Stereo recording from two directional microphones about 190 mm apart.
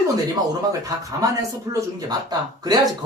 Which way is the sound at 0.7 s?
20° right (ahead or behind).